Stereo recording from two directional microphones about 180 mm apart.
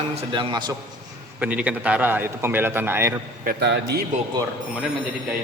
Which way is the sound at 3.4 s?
60° right (ahead or behind).